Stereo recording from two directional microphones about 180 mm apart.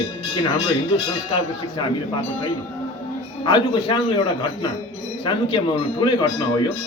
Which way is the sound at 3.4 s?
25° left (ahead or behind).